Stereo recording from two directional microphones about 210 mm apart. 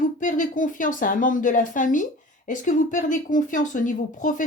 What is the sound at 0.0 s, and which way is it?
Speech, 40° left (ahead or behind).